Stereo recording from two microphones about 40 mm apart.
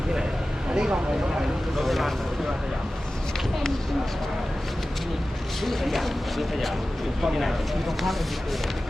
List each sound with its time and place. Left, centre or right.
0.7 s speech: right
1.8 s speech: centre
5.6 s speech: centre